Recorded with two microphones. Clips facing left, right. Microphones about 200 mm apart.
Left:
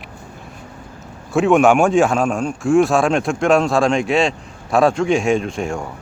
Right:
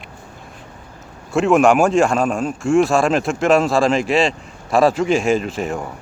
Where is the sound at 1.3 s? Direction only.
Centre (ahead or behind).